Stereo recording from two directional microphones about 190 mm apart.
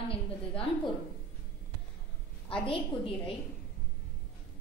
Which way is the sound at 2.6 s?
30° left (ahead or behind).